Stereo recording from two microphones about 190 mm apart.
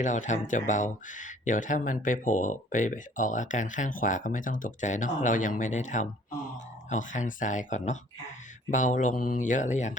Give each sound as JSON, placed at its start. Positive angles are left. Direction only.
{"t": 0.0, "sound": "speech", "side_deg": 40}